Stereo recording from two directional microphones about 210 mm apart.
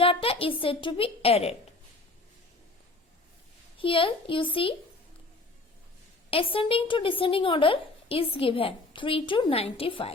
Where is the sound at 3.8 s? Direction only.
25° left (ahead or behind).